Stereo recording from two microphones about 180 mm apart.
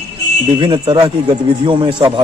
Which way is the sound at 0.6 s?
25° right (ahead or behind).